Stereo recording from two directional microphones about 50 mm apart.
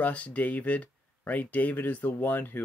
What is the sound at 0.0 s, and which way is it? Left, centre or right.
Speech, left.